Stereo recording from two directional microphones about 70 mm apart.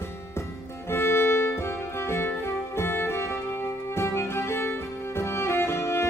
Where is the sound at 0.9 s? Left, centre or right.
Left.